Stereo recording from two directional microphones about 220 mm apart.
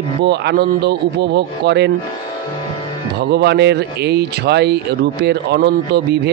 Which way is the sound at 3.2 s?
50° right (ahead or behind).